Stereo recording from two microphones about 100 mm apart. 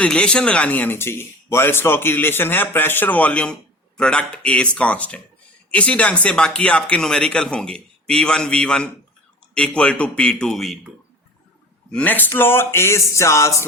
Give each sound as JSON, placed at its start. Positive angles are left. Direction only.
{"t": 0.0, "sound": "speech", "side_deg": 10}
{"t": 11.9, "sound": "speech", "side_deg": 15}